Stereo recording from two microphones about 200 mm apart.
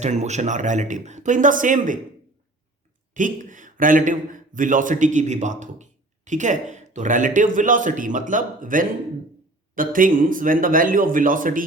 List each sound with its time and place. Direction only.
0.0 s a man's voice: 35° right (ahead or behind)
3.2 s a man's voice: 40° right (ahead or behind)